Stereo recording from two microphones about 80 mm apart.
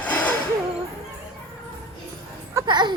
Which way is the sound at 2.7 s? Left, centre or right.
Right.